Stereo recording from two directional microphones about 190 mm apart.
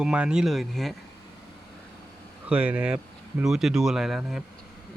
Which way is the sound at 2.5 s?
5° right (ahead or behind).